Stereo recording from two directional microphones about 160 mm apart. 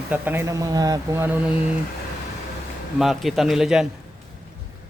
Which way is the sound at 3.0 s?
Centre (ahead or behind).